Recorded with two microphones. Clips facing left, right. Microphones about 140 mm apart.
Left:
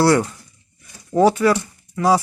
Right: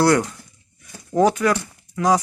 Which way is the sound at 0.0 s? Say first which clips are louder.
Left 1 dB; 5° left (ahead or behind).